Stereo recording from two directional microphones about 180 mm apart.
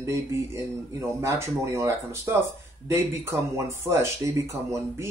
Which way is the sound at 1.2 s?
15° right (ahead or behind).